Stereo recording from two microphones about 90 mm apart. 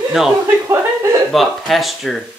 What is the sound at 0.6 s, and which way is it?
Speech, 30° right (ahead or behind).